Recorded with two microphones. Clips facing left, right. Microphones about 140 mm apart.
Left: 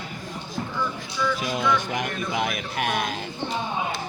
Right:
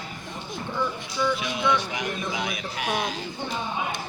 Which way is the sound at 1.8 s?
50° left (ahead or behind).